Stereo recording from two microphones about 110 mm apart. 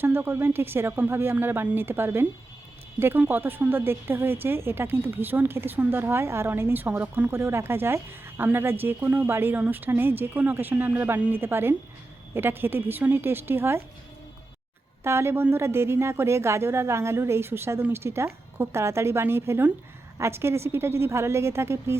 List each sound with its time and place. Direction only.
0.0 s a woman's voice: 20° right (ahead or behind)
15.0 s a woman's voice: 25° right (ahead or behind)